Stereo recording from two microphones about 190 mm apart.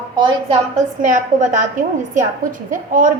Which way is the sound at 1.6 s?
45° right (ahead or behind).